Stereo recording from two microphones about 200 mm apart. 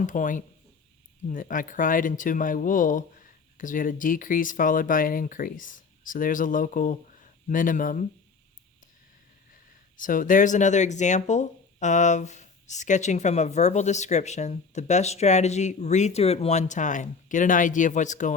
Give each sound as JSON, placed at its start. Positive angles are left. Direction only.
{"t": 0.0, "sound": "speech", "side_deg": 40}
{"t": 10.0, "sound": "speech", "side_deg": 40}